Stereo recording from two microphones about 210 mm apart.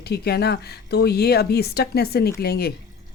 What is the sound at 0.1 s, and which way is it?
Speech, 50° left (ahead or behind).